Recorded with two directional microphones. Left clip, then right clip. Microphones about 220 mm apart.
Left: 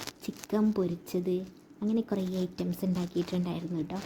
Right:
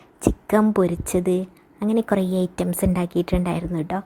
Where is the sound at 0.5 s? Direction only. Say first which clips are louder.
Right 10 dB; 30° right (ahead or behind).